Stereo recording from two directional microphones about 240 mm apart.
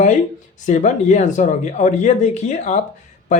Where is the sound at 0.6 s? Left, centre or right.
Left.